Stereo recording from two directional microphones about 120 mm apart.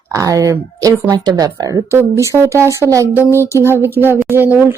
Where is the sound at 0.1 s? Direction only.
25° right (ahead or behind).